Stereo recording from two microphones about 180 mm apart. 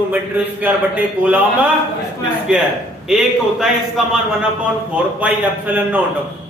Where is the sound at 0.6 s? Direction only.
10° right (ahead or behind).